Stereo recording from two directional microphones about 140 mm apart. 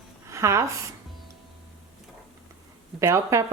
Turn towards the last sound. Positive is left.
turn(degrees=-20)  # may be behind; listen again after turning